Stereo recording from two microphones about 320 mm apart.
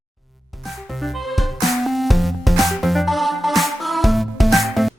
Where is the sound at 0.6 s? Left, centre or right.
Centre.